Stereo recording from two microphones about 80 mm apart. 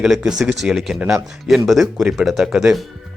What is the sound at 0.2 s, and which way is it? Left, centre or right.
Speech, centre.